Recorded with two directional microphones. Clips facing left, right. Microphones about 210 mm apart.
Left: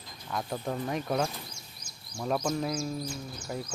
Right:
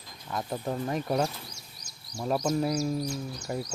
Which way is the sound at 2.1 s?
10° right (ahead or behind).